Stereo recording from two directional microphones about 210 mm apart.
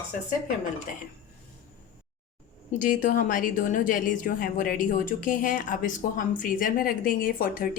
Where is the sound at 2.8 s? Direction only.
40° left (ahead or behind).